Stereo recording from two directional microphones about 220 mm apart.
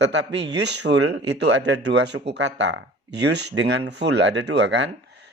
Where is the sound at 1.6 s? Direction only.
50° right (ahead or behind).